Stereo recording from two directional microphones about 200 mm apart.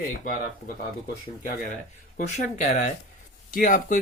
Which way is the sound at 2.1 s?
35° left (ahead or behind).